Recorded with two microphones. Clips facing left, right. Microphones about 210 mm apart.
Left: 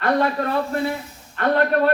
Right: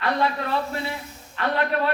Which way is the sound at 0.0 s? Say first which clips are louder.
Left 4 dB; 45° left (ahead or behind).